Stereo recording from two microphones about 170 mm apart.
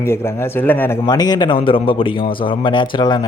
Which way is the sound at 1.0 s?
25° left (ahead or behind).